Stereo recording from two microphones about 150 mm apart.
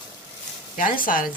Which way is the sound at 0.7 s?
65° left (ahead or behind).